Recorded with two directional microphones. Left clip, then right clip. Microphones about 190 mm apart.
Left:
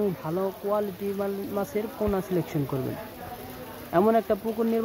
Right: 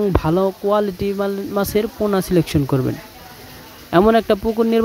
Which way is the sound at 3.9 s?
60° right (ahead or behind).